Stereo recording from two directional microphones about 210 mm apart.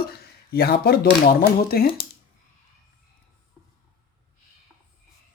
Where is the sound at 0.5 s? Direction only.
50° left (ahead or behind).